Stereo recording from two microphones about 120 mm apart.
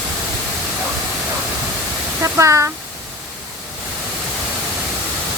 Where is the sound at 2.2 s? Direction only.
25° right (ahead or behind).